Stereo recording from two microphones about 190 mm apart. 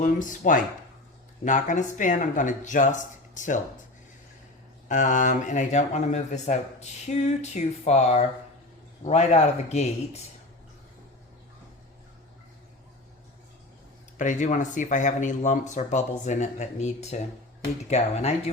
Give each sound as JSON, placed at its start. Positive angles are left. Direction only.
{"t": 0.0, "sound": "speech", "side_deg": 45}
{"t": 4.9, "sound": "speech", "side_deg": 40}
{"t": 14.2, "sound": "speech", "side_deg": 40}